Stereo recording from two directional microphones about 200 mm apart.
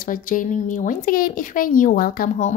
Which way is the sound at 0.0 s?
45° left (ahead or behind).